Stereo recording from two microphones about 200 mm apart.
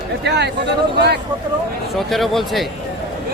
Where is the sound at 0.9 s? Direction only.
55° right (ahead or behind).